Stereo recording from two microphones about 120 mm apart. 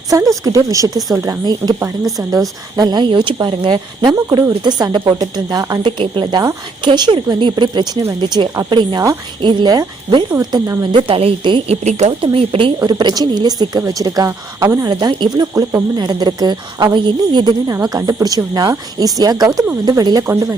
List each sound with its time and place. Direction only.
0.1 s speech: 25° right (ahead or behind)
0.9 s speech: centre (ahead or behind)
1.2 s speech: 30° right (ahead or behind)
2.7 s speech: 35° right (ahead or behind)
5.8 s speech: 45° right (ahead or behind)
10.9 s speech: 50° right (ahead or behind)
11.8 s speech: 70° right (ahead or behind)
12.2 s speech: 50° right (ahead or behind); by 14.8 s 25° right (ahead or behind)
14.8 s speech: 35° right (ahead or behind)
17.7 s speech: 30° right (ahead or behind)
20.2 s speech: 20° right (ahead or behind)